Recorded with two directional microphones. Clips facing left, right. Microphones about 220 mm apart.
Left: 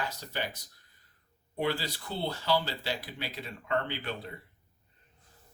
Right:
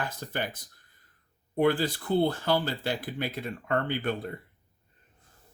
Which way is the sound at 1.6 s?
50° right (ahead or behind).